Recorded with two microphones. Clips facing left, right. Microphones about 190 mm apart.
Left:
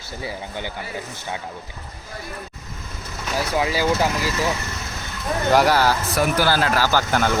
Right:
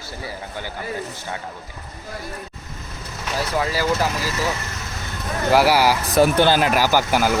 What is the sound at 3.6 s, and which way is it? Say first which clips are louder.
Speech: left 1 dB; 15° left (ahead or behind).